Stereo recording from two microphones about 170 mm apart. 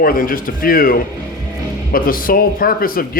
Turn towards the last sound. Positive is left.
turn(degrees=60)  # may be behind; listen again after turning